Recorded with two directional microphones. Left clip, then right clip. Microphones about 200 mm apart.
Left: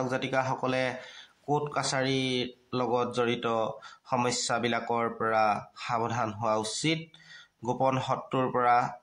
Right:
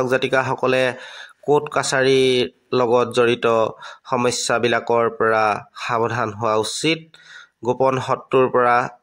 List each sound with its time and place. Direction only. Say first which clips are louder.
0.0 s speech: right 11 dB; 40° right (ahead or behind)